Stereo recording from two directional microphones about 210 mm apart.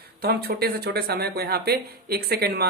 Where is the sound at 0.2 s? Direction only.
50° right (ahead or behind).